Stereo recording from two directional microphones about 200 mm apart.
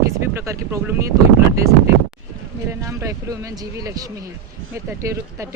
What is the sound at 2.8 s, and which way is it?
Speech, 15° right (ahead or behind).